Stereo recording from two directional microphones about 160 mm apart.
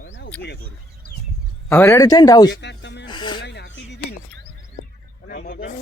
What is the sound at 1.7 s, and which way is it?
Speech, 15° left (ahead or behind).